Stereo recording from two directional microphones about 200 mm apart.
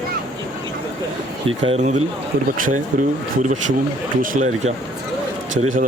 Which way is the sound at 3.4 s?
40° right (ahead or behind).